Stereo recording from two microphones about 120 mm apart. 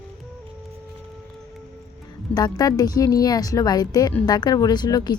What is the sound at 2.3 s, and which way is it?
A woman's voice, 35° left (ahead or behind).